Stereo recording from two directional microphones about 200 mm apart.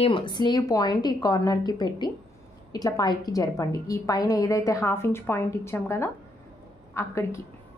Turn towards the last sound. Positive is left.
turn(degrees=15)  # may be behind; listen again after turning